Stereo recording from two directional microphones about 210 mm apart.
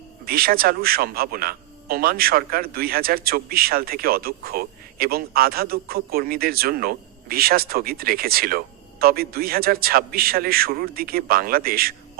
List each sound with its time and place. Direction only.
0.3 s a man's voice: 45° right (ahead or behind)